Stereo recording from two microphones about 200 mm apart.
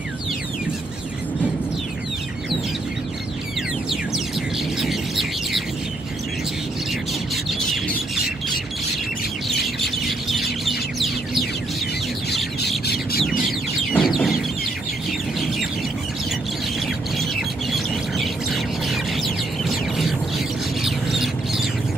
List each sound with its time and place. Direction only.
4.7 s bird: centre (ahead or behind)
9.8 s bird: centre (ahead or behind)
12.6 s chicken: 55° left (ahead or behind)
13.9 s chicken: centre (ahead or behind)
17.7 s bird: centre (ahead or behind)